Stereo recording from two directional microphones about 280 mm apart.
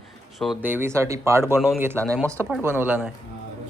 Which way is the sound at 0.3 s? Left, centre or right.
Centre.